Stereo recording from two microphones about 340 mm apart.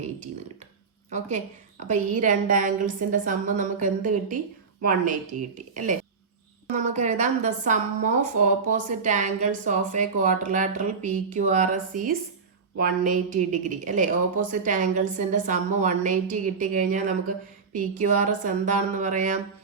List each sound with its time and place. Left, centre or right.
1.9 s a woman's voice: right